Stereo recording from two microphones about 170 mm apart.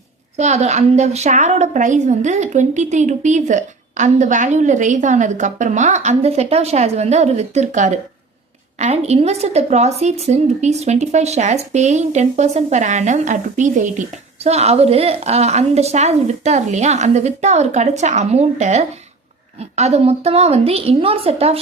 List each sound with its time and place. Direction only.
0.3 s a woman's voice: 40° right (ahead or behind)